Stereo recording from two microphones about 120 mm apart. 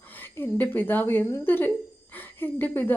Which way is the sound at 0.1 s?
15° left (ahead or behind).